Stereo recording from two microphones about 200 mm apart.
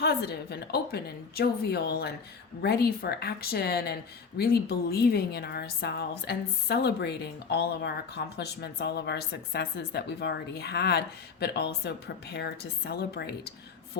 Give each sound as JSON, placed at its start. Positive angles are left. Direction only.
{"t": 0.0, "sound": "a woman's voice", "side_deg": 50}